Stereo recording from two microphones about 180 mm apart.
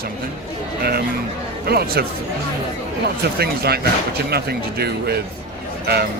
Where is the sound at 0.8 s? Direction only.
60° right (ahead or behind).